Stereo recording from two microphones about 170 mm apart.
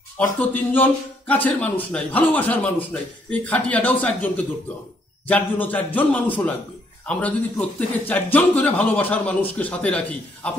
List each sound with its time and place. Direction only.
0.4 s speech: 10° left (ahead or behind)